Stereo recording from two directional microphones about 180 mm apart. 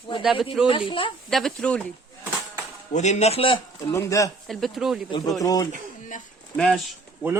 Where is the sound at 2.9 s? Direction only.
40° left (ahead or behind).